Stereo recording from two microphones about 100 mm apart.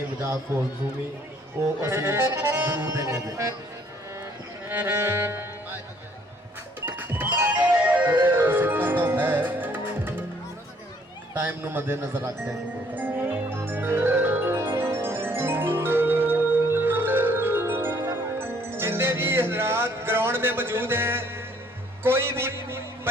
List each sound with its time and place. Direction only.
0.2 s accordion: 25° right (ahead or behind)
1.8 s accordion: 25° right (ahead or behind)
2.8 s music: 30° right (ahead or behind)
4.7 s music: 20° right (ahead or behind)
6.8 s music: 20° right (ahead or behind)
11.3 s accordion: 20° right (ahead or behind)
12.5 s music: 15° right (ahead or behind)
22.0 s a man's voice: 25° right (ahead or behind)